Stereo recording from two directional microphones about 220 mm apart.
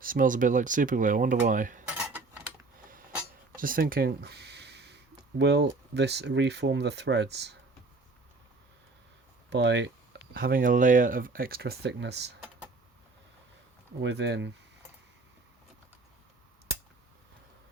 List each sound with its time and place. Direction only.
0.0 s speech: 40° right (ahead or behind)
1.8 s cutlery: 5° right (ahead or behind)
3.5 s a sound: 40° right (ahead or behind)
5.4 s speech: 50° right (ahead or behind)
9.5 s speech: 50° right (ahead or behind)
14.0 s speech: 50° right (ahead or behind)